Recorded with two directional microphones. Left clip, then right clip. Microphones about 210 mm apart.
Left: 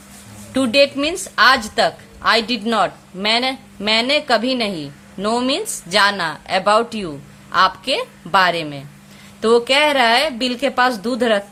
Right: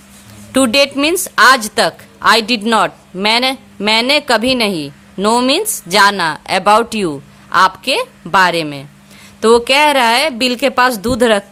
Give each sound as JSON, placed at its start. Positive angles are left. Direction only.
{"t": 0.5, "sound": "a woman's voice", "side_deg": -30}